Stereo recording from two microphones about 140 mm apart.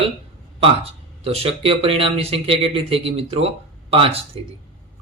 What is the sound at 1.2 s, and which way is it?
A man's voice, 45° right (ahead or behind).